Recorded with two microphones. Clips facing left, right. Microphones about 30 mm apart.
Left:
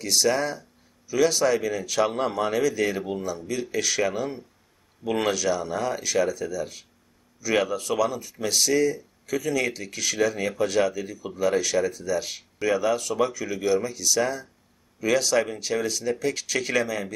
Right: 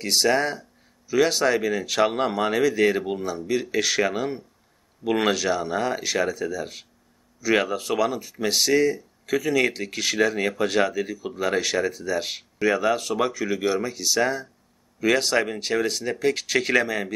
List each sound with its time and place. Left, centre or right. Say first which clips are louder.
0.0 s speech: right 2 dB; right